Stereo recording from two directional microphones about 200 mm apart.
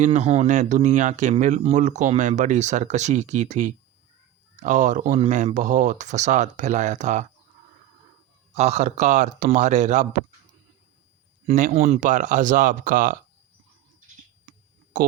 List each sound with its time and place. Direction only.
0.0 s speech: 35° right (ahead or behind)
8.5 s speech: 35° right (ahead or behind)
11.4 s speech: 35° right (ahead or behind)